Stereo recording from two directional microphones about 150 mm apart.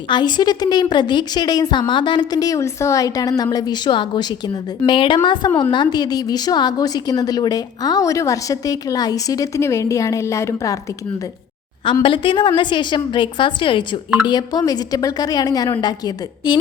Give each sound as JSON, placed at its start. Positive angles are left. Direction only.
{"t": 0.1, "sound": "a woman's voice", "side_deg": 30}
{"t": 12.0, "sound": "a woman's voice", "side_deg": 35}